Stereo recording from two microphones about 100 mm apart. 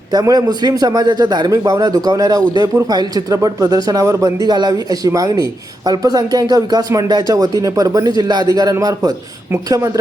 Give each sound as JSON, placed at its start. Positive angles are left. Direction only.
{"t": 0.1, "sound": "speech", "side_deg": -40}
{"t": 1.5, "sound": "speech", "side_deg": -35}